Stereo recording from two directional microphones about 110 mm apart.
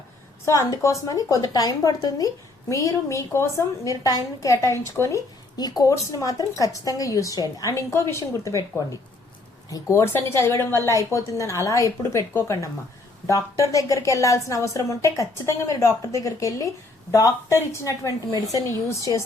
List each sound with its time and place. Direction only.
0.4 s a woman's voice: 30° left (ahead or behind)